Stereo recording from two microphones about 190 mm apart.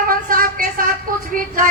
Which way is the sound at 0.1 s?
45° right (ahead or behind).